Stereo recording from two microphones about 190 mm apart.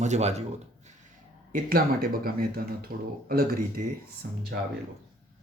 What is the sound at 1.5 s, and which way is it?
Speech, 50° right (ahead or behind).